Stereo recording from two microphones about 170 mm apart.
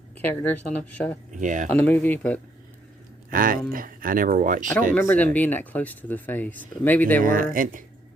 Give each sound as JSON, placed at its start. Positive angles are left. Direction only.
{"t": 0.3, "sound": "speech", "side_deg": 10}
{"t": 1.3, "sound": "speech", "side_deg": -45}
{"t": 1.7, "sound": "speech", "side_deg": 10}
{"t": 3.2, "sound": "speech", "side_deg": -55}
{"t": 4.9, "sound": "speech", "side_deg": 10}
{"t": 7.2, "sound": "speech", "side_deg": -55}